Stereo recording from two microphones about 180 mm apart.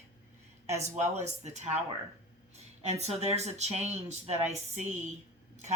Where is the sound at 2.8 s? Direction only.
35° right (ahead or behind).